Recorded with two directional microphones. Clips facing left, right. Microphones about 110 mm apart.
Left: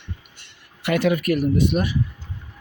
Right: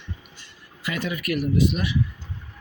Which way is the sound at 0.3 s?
65° left (ahead or behind).